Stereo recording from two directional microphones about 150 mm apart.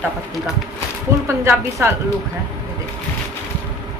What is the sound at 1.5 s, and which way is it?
Speech, 15° right (ahead or behind).